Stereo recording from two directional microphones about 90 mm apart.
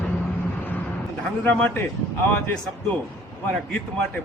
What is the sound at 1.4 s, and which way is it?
Speech, 20° left (ahead or behind).